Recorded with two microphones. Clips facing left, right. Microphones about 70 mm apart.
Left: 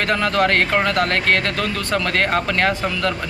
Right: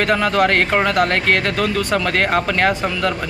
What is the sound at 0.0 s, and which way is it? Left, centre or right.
Speech, centre.